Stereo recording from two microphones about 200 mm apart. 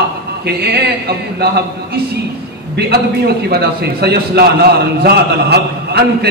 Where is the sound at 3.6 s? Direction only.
55° right (ahead or behind).